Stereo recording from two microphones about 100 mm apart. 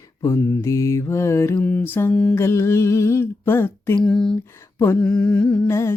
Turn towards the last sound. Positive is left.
turn(degrees=25)  # may be behind; listen again after turning